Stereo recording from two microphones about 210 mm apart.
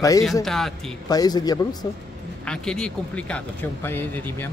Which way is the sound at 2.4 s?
5° left (ahead or behind).